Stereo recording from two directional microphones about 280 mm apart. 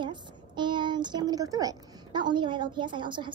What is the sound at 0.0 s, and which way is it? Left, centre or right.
Speech, centre.